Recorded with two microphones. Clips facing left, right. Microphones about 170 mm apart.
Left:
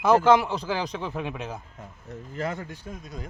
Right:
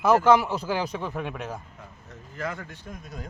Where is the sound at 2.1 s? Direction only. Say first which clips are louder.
Left 3 dB; 30° left (ahead or behind).